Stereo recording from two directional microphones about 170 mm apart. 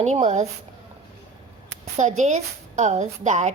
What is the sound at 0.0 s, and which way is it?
Speech, 40° right (ahead or behind).